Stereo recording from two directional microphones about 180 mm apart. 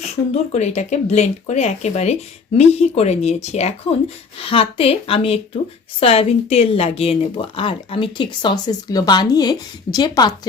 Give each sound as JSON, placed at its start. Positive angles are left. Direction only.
{"t": 0.5, "sound": "speech", "side_deg": 40}